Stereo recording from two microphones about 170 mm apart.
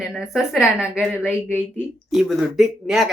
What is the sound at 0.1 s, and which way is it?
Speech, 5° right (ahead or behind).